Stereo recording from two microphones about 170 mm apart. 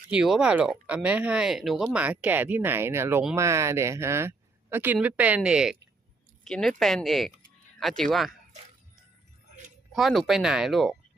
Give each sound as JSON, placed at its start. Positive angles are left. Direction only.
{"t": 0.1, "sound": "speech", "side_deg": -5}
{"t": 9.9, "sound": "speech", "side_deg": 0}